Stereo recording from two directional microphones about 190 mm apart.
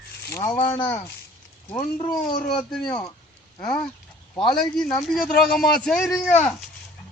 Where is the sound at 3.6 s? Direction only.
25° left (ahead or behind).